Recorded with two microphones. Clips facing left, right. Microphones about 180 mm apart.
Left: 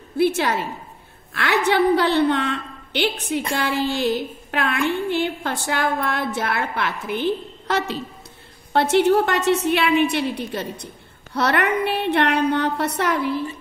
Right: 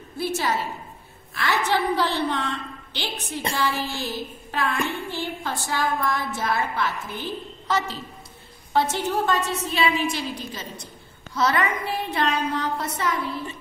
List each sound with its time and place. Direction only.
0.2 s a woman's voice: 65° left (ahead or behind)